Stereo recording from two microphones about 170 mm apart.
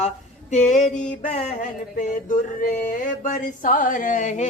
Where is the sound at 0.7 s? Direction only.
45° left (ahead or behind).